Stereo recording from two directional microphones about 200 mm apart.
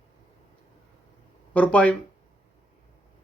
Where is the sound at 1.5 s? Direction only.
5° left (ahead or behind).